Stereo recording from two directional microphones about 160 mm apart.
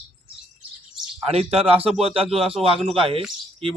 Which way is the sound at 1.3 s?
40° right (ahead or behind).